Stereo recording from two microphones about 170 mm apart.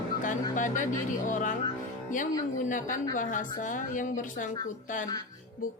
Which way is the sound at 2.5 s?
50° left (ahead or behind).